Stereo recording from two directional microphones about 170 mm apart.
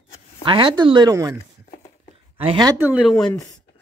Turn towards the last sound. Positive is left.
turn(degrees=20)  # may be behind; listen again after turning